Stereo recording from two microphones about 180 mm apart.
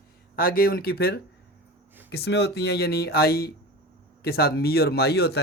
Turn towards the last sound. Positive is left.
turn(degrees=60)  # may be behind; listen again after turning